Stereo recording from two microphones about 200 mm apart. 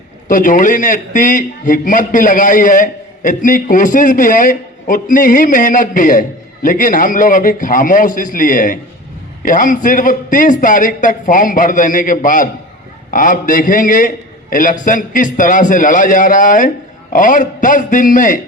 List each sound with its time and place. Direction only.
0.3 s a man's voice: 40° left (ahead or behind)